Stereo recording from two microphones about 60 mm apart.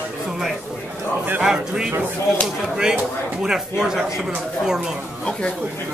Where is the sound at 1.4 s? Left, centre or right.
Centre.